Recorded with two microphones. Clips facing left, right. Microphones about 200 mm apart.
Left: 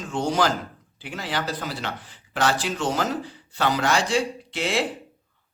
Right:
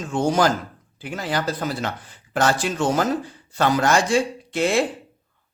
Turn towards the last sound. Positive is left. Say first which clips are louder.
# right 5 dB
turn(degrees=-50)  # may be behind; listen again after turning